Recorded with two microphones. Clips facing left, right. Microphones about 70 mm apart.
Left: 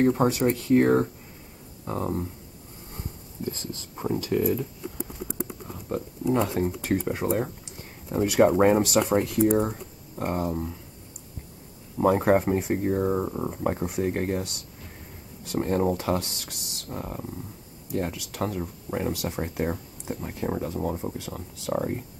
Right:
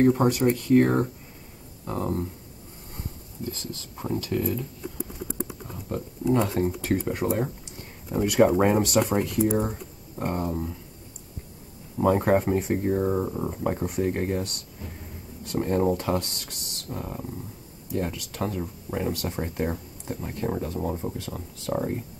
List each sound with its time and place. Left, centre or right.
0.0 s speech: centre
4.0 s speech: centre
5.9 s speech: centre
12.1 s speech: centre